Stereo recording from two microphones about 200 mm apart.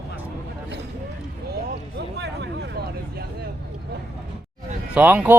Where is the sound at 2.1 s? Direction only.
60° right (ahead or behind).